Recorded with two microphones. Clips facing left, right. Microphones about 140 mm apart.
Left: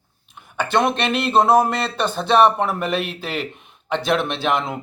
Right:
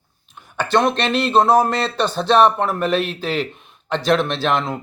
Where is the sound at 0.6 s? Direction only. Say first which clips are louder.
Right 2 dB; 5° left (ahead or behind).